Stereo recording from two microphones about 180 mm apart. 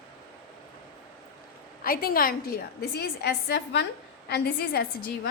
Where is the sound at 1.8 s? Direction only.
50° left (ahead or behind).